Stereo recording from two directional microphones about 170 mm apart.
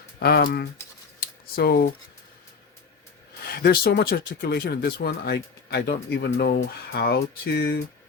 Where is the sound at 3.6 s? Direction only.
65° left (ahead or behind).